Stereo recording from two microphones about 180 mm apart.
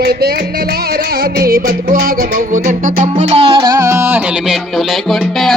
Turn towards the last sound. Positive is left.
turn(degrees=0)  # may be behind; listen again after turning